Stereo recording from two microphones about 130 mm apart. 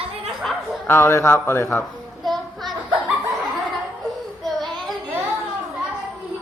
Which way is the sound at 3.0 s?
Centre (ahead or behind).